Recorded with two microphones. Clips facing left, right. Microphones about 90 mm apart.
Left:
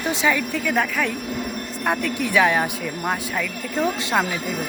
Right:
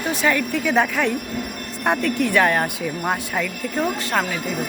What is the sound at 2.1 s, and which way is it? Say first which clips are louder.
Speech: left 1 dB; 10° left (ahead or behind).